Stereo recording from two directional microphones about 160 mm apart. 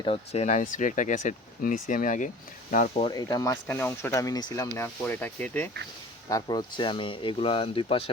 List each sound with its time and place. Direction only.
0.0 s speech: 40° left (ahead or behind)
3.0 s speech: 25° left (ahead or behind)
3.7 s speech: 10° left (ahead or behind)
4.8 s speech: 10° left (ahead or behind)
6.2 s speech: 25° left (ahead or behind)